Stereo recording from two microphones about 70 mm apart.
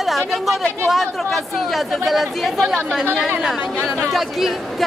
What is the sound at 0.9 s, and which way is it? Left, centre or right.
Speech, centre.